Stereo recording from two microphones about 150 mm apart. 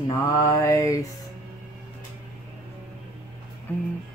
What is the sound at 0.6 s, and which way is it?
Speech, 20° left (ahead or behind).